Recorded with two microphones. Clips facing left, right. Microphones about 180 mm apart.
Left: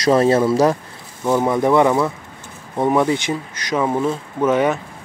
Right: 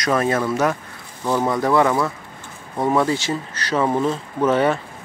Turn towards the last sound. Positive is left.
turn(degrees=10)  # may be behind; listen again after turning